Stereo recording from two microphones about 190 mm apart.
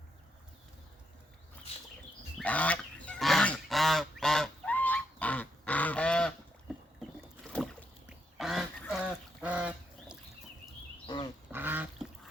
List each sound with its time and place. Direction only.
2.4 s goose: 5° left (ahead or behind)
7.5 s rowboat: 5° left (ahead or behind)
8.4 s duck: centre (ahead or behind)
9.4 s goose: 5° right (ahead or behind)
11.0 s pig: 20° left (ahead or behind)
11.5 s duck: 10° right (ahead or behind)